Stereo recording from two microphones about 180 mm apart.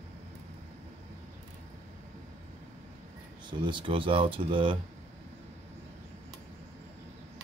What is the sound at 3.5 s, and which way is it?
Speech, 25° right (ahead or behind).